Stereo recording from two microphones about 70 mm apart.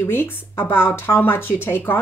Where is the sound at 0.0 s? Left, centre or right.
Left.